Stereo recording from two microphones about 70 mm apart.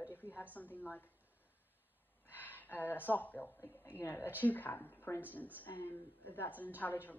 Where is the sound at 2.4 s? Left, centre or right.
Left.